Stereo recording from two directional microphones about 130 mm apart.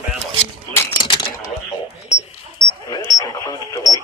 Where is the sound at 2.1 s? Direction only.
55° left (ahead or behind).